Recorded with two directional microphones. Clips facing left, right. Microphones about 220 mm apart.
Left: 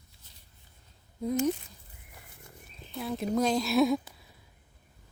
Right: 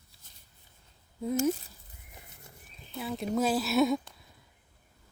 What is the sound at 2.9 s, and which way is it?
A woman's voice, centre (ahead or behind).